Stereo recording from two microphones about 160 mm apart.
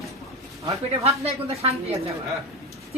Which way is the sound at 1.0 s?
40° right (ahead or behind).